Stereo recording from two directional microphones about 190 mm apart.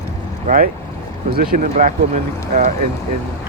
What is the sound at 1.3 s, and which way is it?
Speech, 50° right (ahead or behind).